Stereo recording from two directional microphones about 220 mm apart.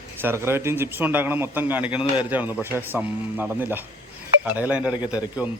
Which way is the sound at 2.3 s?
10° right (ahead or behind).